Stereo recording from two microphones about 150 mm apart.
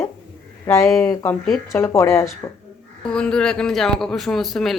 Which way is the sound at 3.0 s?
5° left (ahead or behind).